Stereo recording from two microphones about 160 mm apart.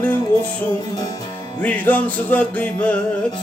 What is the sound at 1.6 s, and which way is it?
Music, 10° left (ahead or behind).